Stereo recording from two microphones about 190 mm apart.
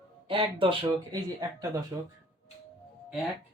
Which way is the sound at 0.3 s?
25° right (ahead or behind).